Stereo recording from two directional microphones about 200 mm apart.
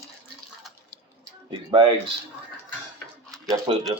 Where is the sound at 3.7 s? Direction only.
30° right (ahead or behind).